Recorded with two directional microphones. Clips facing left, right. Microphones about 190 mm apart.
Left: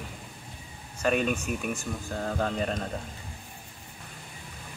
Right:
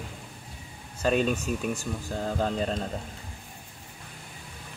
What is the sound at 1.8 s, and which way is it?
Speech, 10° right (ahead or behind).